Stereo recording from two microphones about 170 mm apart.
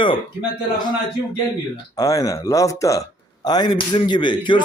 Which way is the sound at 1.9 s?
20° left (ahead or behind).